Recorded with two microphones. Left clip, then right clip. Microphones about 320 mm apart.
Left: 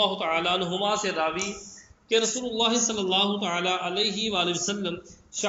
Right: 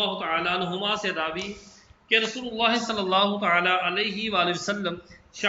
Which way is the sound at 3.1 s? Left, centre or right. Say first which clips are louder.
Right 5 dB; centre.